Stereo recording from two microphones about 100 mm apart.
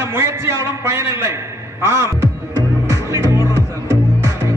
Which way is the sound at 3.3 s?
30° right (ahead or behind).